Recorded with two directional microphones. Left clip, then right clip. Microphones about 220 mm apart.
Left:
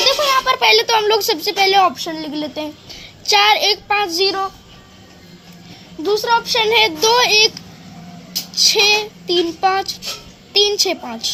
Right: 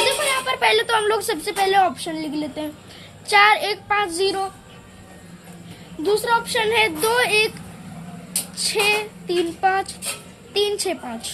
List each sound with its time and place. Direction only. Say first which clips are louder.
0.0 s a child's voice: left 6 dB; 15° left (ahead or behind)
6.0 s a woman's voice: left 3 dB; 15° left (ahead or behind)
8.6 s a woman's voice: left 7 dB; 20° left (ahead or behind)